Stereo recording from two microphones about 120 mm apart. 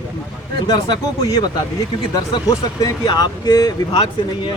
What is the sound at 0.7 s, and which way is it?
Speech, 35° left (ahead or behind).